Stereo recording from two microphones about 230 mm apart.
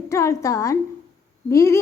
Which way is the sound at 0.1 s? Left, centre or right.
Centre.